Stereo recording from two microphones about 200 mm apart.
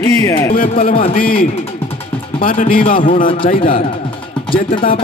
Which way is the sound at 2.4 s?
45° left (ahead or behind).